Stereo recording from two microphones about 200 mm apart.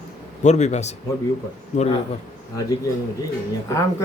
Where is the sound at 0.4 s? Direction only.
35° left (ahead or behind).